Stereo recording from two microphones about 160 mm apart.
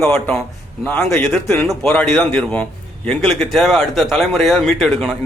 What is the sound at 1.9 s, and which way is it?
A man's voice, 10° left (ahead or behind).